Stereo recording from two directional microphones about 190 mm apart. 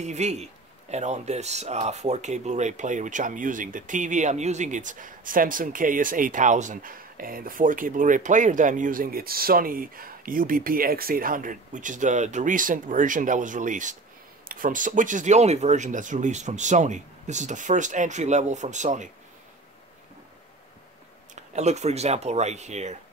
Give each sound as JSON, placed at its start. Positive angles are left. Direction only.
{"t": 0.0, "sound": "speech", "side_deg": -35}
{"t": 21.5, "sound": "speech", "side_deg": -35}